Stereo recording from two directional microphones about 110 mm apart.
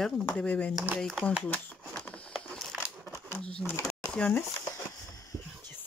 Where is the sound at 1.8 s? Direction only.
10° left (ahead or behind).